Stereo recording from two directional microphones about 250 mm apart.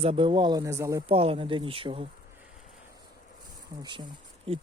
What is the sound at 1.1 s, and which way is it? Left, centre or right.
Speech, right.